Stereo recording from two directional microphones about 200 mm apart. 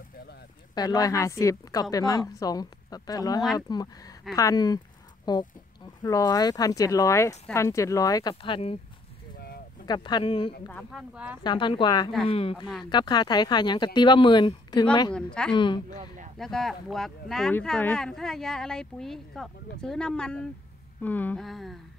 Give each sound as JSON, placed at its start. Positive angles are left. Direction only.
{"t": 0.7, "sound": "a woman's voice", "side_deg": 20}
{"t": 9.8, "sound": "a woman's voice", "side_deg": 20}
{"t": 10.7, "sound": "speech", "side_deg": 0}
{"t": 11.4, "sound": "a woman's voice", "side_deg": 25}
{"t": 15.1, "sound": "speech", "side_deg": 5}
{"t": 15.5, "sound": "a woman's voice", "side_deg": 25}
{"t": 16.3, "sound": "speech", "side_deg": 0}